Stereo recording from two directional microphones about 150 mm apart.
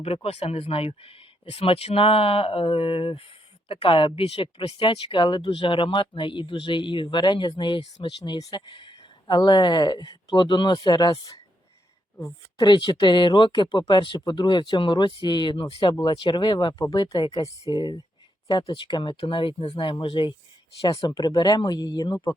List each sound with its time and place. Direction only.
0.0 s speech: 40° left (ahead or behind)
12.5 s speech: 30° left (ahead or behind)